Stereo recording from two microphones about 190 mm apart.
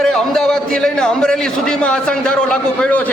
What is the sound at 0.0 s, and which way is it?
A man's voice, 5° left (ahead or behind).